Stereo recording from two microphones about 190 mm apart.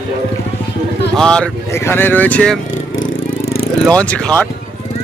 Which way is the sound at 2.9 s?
90° left.